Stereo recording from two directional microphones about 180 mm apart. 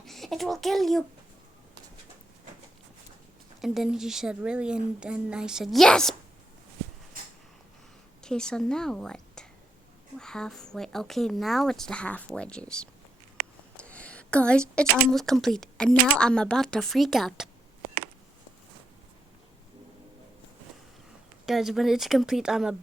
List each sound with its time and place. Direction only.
0.0 s a sound: centre (ahead or behind)
3.6 s speech: centre (ahead or behind)
8.2 s a woman's voice: 5° left (ahead or behind)
13.7 s a sound: 5° left (ahead or behind)
15.0 s speech: centre (ahead or behind)
21.4 s speech: centre (ahead or behind)